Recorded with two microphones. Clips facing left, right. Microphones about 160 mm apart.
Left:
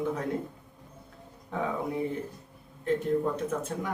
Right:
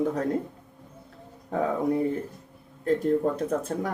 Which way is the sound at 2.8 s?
40° right (ahead or behind).